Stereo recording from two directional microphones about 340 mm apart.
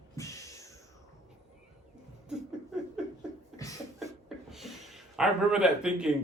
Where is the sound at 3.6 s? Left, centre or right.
Centre.